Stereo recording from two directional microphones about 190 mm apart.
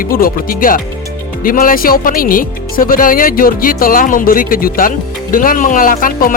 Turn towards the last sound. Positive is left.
turn(degrees=45)  # may be behind; listen again after turning